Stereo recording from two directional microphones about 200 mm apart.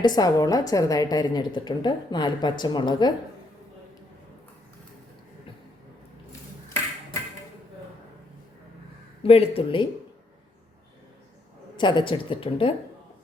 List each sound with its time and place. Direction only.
0.0 s a woman's voice: 20° left (ahead or behind)
9.2 s a woman's voice: 30° left (ahead or behind)
11.8 s a woman's voice: 25° left (ahead or behind)